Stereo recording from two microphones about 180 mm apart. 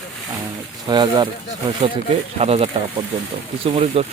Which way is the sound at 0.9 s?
25° right (ahead or behind).